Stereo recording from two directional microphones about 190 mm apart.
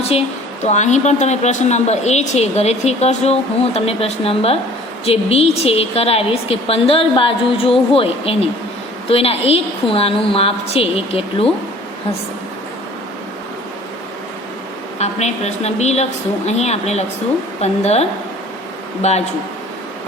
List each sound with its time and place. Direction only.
0.1 s a woman's voice: 35° left (ahead or behind)
14.9 s a woman's voice: 35° left (ahead or behind)